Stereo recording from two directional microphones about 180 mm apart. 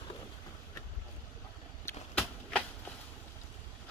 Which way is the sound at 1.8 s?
10° left (ahead or behind).